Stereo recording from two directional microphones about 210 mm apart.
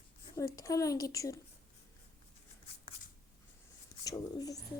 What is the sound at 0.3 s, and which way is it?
A woman's voice, 15° left (ahead or behind).